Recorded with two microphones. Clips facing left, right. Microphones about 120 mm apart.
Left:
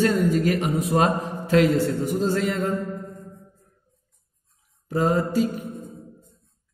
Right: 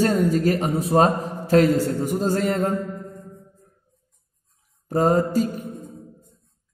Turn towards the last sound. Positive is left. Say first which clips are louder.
# right 2 dB
turn(degrees=-40)  # may be behind; listen again after turning